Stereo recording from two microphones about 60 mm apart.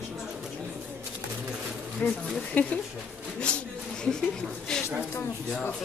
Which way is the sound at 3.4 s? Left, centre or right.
Centre.